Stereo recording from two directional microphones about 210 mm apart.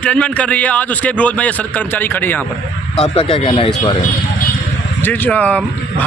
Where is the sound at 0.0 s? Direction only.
5° left (ahead or behind).